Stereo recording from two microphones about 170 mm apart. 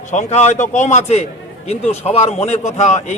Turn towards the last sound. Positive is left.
turn(degrees=45)  # may be behind; listen again after turning